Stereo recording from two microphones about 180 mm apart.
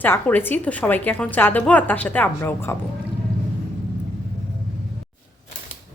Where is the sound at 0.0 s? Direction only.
10° left (ahead or behind).